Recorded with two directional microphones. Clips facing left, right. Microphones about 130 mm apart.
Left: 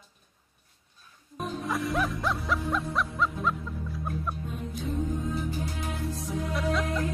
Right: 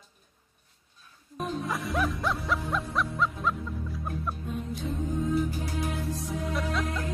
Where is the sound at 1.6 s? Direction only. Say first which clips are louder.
Left 2 dB; centre (ahead or behind).